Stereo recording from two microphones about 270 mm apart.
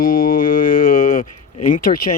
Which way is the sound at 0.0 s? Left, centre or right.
Left.